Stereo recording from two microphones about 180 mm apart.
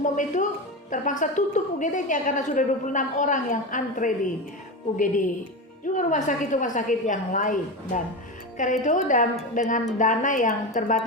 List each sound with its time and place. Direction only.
0.0 s music: 45° left (ahead or behind)
0.9 s a woman's voice: 45° left (ahead or behind)
5.8 s a woman's voice: 45° left (ahead or behind)